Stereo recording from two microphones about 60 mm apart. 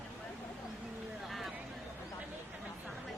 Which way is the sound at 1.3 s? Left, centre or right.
Centre.